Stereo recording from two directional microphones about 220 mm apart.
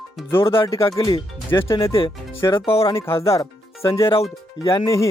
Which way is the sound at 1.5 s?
10° left (ahead or behind).